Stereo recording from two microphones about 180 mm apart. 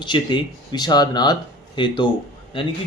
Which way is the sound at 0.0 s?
25° left (ahead or behind).